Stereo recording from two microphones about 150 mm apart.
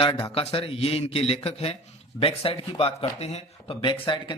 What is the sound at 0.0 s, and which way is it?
Speech, 40° left (ahead or behind).